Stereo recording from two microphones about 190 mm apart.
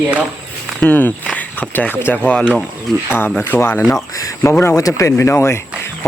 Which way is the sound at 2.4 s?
5° right (ahead or behind).